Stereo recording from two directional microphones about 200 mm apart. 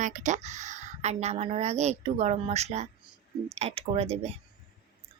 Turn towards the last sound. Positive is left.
turn(degrees=-30)  # may be behind; listen again after turning